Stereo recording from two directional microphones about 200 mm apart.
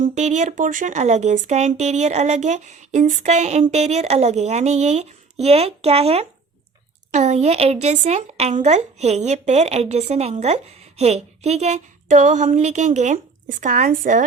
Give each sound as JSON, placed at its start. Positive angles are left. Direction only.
{"t": 0.0, "sound": "speech", "side_deg": -35}